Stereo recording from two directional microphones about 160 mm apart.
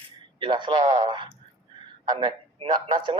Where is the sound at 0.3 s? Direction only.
30° right (ahead or behind).